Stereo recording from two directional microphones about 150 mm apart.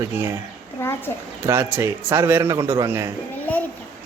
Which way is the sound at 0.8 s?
15° left (ahead or behind).